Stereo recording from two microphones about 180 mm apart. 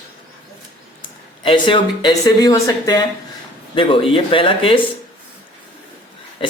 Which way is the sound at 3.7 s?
30° left (ahead or behind).